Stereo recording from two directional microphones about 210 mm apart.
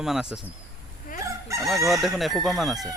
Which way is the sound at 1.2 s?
15° right (ahead or behind).